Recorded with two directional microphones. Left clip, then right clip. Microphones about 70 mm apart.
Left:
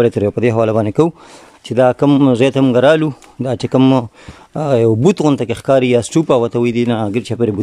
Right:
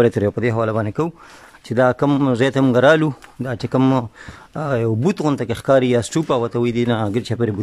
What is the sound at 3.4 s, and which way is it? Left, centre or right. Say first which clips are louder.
Speech: left 6 dB; left.